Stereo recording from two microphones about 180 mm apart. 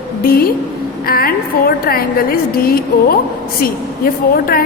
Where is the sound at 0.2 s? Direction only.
55° left (ahead or behind).